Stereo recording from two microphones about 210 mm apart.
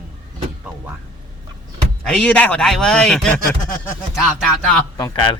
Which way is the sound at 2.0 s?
5° left (ahead or behind).